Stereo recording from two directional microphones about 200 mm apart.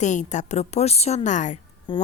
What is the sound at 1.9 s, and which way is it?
Speech, 20° left (ahead or behind).